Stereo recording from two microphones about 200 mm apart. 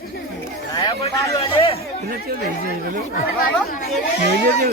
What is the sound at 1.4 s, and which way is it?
Speech, 30° left (ahead or behind).